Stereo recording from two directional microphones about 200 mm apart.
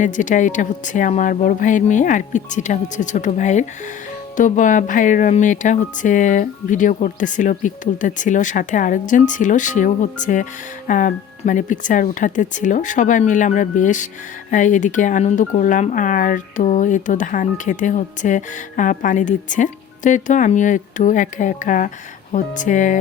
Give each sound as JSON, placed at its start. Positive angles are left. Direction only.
{"t": 0.0, "sound": "speech", "side_deg": 40}